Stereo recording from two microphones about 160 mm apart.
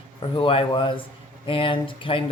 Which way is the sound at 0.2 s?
35° left (ahead or behind).